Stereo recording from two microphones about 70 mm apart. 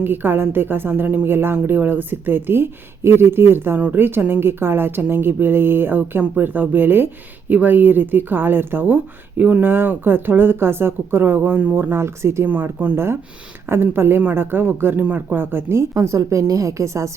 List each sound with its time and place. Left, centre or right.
0.0 s a woman's voice: right
12.5 s a woman's voice: right
16.0 s a woman's voice: right